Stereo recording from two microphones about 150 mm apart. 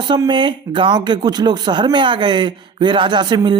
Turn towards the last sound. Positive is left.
turn(degrees=-30)  # may be behind; listen again after turning